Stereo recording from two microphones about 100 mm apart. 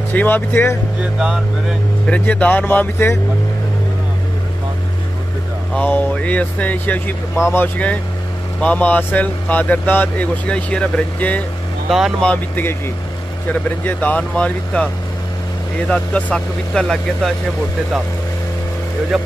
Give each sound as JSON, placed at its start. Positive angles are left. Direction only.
{"t": 0.1, "sound": "speech", "side_deg": 20}
{"t": 1.2, "sound": "speech", "side_deg": -5}
{"t": 2.0, "sound": "speech", "side_deg": 10}
{"t": 5.8, "sound": "speech", "side_deg": 15}
{"t": 15.9, "sound": "speech", "side_deg": 15}